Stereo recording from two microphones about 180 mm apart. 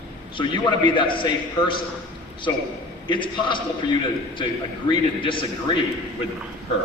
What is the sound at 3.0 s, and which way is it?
Speech, 25° left (ahead or behind).